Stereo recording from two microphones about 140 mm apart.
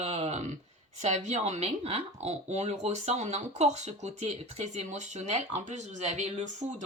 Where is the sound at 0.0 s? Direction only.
55° right (ahead or behind).